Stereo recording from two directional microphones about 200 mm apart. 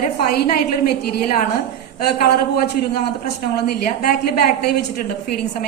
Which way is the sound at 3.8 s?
50° left (ahead or behind).